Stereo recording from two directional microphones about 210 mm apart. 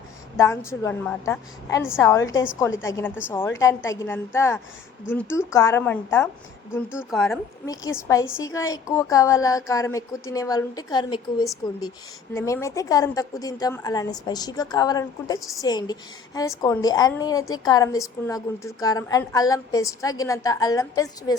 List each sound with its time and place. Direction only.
0.3 s a woman's voice: 15° left (ahead or behind)
7.7 s a woman's voice: 15° left (ahead or behind)